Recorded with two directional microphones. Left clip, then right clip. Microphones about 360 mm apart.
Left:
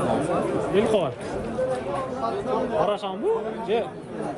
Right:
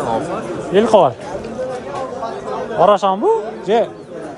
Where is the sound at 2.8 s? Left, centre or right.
Centre.